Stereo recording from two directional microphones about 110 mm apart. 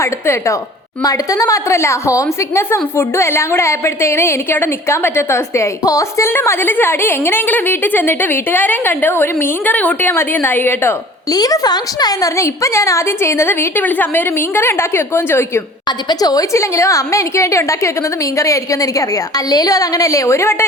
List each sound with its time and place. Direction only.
0.0 s a woman's voice: 25° left (ahead or behind)
11.3 s a woman's voice: 35° left (ahead or behind)
16.0 s a woman's voice: 35° left (ahead or behind)